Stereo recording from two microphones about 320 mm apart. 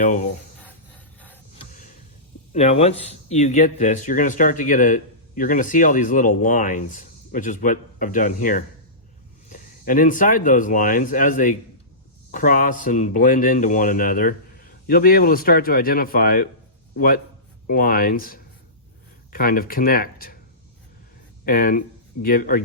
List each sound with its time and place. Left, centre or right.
0.0 s speech: left
1.7 s a sound: left
2.5 s speech: left
17.7 s speech: left
21.4 s speech: left